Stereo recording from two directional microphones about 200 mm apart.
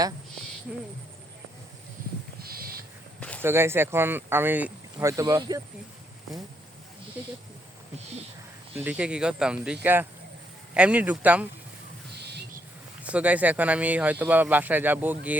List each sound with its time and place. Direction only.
0.7 s speech: 5° right (ahead or behind)
2.4 s owl: 50° right (ahead or behind)
3.4 s speech: 10° right (ahead or behind)
8.7 s speech: 10° right (ahead or behind)
12.1 s owl: 55° right (ahead or behind)
13.0 s speech: 5° right (ahead or behind)